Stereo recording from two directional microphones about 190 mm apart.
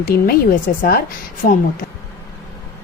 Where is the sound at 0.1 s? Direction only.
50° left (ahead or behind).